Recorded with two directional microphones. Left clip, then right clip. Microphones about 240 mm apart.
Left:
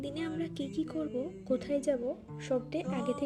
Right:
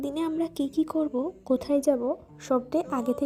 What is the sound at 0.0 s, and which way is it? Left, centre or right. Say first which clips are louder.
A woman's voice: right 8 dB; right.